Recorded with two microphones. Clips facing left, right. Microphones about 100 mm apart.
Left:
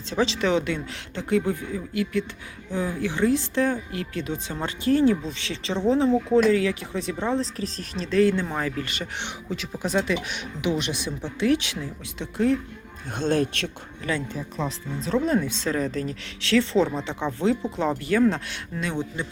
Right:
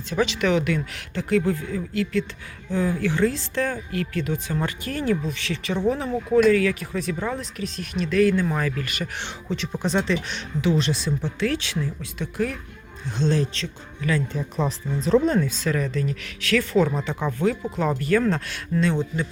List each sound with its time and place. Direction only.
0.1 s speech: 25° left (ahead or behind)
9.5 s speech: 5° left (ahead or behind); by 12.5 s 25° left (ahead or behind)
13.1 s speech: 55° left (ahead or behind)
14.0 s speech: 25° left (ahead or behind)
14.5 s speech: 5° right (ahead or behind)
15.4 s speech: 25° left (ahead or behind)